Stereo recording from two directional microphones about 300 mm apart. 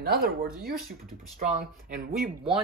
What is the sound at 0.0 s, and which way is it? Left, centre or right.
Speech, right.